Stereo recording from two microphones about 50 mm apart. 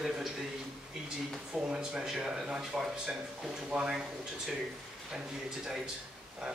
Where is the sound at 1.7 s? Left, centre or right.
Centre.